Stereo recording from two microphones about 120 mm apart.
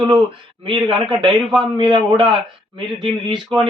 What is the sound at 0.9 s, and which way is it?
A man's voice, 40° right (ahead or behind).